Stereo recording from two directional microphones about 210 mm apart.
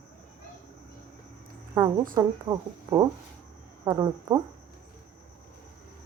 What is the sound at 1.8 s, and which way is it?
Speech, 10° right (ahead or behind).